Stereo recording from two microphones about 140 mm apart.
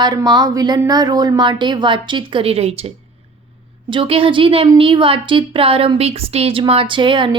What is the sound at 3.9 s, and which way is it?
Speech, 40° right (ahead or behind).